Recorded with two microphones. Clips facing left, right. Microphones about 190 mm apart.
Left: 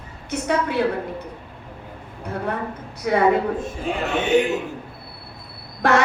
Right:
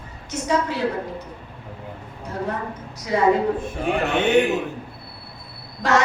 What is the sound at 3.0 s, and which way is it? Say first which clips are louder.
Speech: left 2 dB; 60° left (ahead or behind).